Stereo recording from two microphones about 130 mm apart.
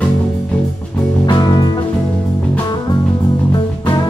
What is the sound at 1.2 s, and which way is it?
Music, 35° left (ahead or behind).